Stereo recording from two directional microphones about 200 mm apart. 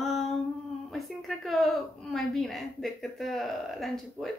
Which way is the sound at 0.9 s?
Centre (ahead or behind).